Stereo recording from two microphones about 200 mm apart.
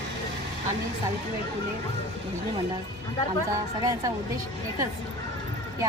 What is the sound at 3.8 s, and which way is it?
Speech, 15° right (ahead or behind).